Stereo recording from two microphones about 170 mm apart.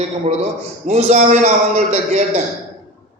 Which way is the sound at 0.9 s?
40° right (ahead or behind).